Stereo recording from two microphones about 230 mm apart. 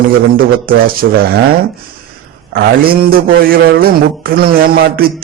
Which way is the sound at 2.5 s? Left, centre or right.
Right.